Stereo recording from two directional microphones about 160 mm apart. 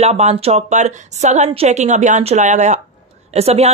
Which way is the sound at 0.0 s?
40° right (ahead or behind).